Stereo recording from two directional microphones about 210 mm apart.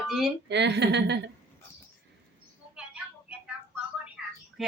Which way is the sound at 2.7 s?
5° right (ahead or behind).